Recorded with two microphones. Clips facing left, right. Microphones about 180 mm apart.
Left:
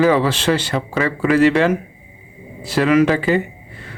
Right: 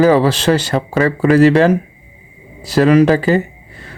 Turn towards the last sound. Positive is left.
turn(degrees=-40)  # may be behind; listen again after turning